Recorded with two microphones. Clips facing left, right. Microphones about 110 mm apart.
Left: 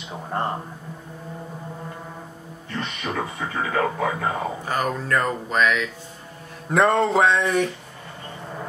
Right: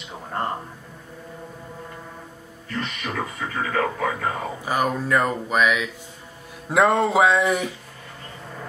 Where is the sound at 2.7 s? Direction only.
30° left (ahead or behind).